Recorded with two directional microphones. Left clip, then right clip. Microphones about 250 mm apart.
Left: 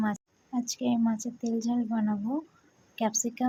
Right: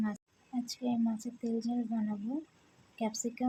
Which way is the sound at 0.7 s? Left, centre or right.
Centre.